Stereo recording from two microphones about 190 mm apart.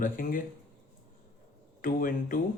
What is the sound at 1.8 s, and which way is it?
Speech, 45° left (ahead or behind).